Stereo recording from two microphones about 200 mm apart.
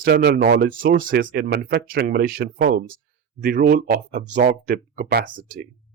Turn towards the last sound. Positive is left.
turn(degrees=-45)  # may be behind; listen again after turning